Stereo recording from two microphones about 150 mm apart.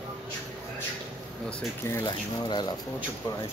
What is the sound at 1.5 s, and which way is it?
Speech, 10° left (ahead or behind).